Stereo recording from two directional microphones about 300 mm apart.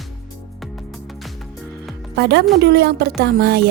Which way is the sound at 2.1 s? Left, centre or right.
Right.